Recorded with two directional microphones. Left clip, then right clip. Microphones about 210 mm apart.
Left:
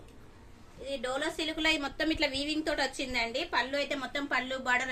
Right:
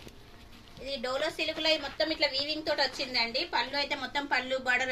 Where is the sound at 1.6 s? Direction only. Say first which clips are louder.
Even; 50° left (ahead or behind); by 4.8 s 25° left (ahead or behind).